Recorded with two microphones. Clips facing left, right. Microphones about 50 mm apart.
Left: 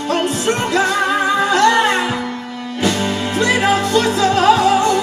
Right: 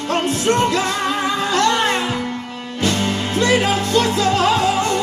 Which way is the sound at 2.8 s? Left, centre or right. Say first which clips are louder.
Left 2 dB; left.